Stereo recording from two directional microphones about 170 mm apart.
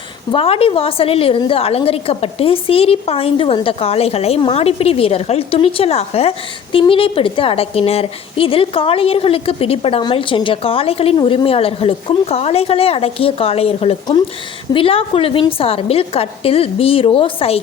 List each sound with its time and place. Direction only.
0.3 s a woman's voice: 35° left (ahead or behind)